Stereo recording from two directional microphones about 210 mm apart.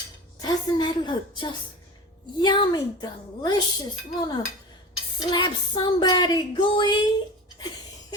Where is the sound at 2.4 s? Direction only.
20° left (ahead or behind).